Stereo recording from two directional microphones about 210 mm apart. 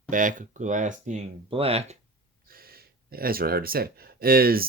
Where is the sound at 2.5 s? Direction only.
45° right (ahead or behind).